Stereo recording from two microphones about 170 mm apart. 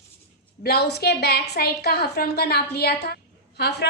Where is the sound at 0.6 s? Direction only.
70° left (ahead or behind).